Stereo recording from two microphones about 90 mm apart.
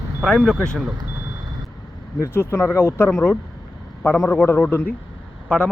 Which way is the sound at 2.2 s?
30° left (ahead or behind).